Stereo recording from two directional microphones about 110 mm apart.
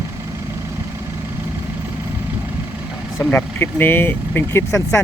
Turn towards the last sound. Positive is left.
turn(degrees=25)  # may be behind; listen again after turning